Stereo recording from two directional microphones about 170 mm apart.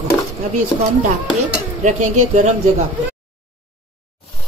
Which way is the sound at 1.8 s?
45° right (ahead or behind).